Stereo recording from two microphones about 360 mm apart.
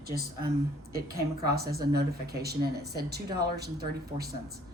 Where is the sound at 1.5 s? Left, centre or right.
Right.